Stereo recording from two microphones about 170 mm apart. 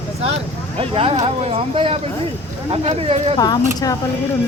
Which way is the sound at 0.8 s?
35° right (ahead or behind).